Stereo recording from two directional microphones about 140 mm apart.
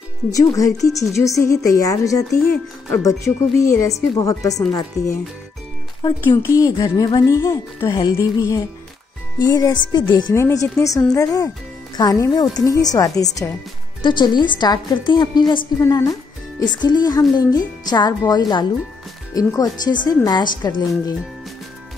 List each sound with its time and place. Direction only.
0.3 s a woman's voice: 25° left (ahead or behind)
6.2 s a woman's voice: 20° left (ahead or behind)